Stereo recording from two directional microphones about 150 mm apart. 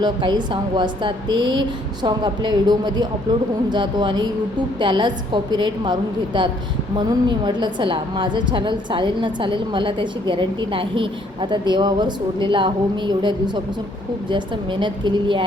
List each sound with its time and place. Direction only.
0.0 s a woman's voice: 30° right (ahead or behind)